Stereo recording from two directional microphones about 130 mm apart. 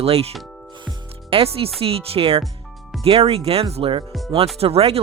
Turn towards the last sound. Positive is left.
turn(degrees=-50)  # may be behind; listen again after turning